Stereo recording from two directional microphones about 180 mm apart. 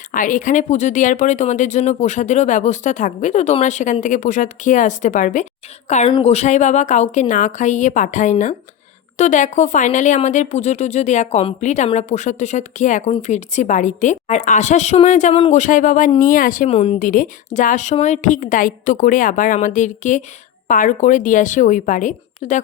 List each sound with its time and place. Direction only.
0.1 s speech: 45° left (ahead or behind)
16.7 s speech: 35° left (ahead or behind)